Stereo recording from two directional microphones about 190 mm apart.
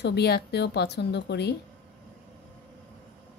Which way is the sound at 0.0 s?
60° left (ahead or behind).